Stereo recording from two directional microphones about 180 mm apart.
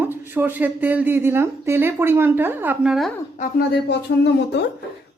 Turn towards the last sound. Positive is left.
turn(degrees=70)  # may be behind; listen again after turning